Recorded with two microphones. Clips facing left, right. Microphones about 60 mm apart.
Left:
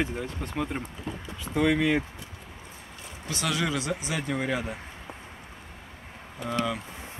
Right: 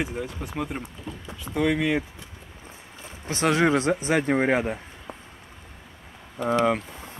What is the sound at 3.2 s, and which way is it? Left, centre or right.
Speech, right.